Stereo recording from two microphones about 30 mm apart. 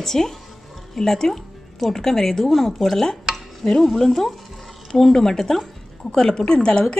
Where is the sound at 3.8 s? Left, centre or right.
Centre.